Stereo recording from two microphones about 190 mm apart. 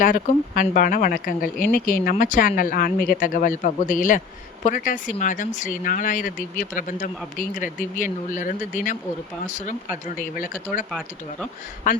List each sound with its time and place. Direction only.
0.0 s speech: 50° left (ahead or behind)
11.9 s speech: 45° left (ahead or behind)